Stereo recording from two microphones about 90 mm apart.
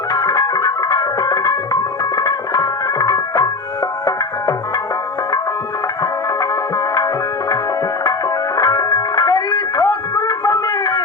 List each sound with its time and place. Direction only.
0.1 s music: 40° left (ahead or behind)
6.0 s music: 40° left (ahead or behind)
8.5 s music: 40° left (ahead or behind)